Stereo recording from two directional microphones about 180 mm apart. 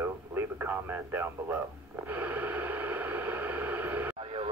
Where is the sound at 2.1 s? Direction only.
10° right (ahead or behind).